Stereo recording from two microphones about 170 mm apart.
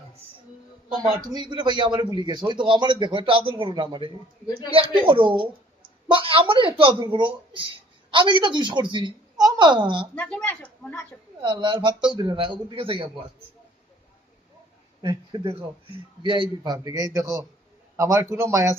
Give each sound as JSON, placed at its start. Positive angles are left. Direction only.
{"t": 1.3, "sound": "a woman's voice", "side_deg": -25}
{"t": 10.2, "sound": "speech", "side_deg": 10}
{"t": 11.4, "sound": "a woman's voice", "side_deg": -25}
{"t": 15.0, "sound": "a woman's voice", "side_deg": -30}